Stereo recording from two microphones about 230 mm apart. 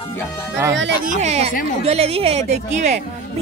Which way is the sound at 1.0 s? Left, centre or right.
Right.